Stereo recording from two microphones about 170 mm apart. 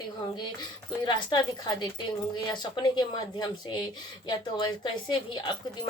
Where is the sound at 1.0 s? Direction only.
25° left (ahead or behind).